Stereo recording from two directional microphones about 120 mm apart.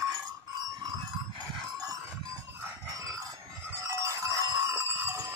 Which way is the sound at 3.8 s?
25° right (ahead or behind).